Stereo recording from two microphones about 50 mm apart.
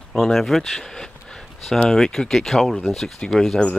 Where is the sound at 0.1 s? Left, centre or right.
Centre.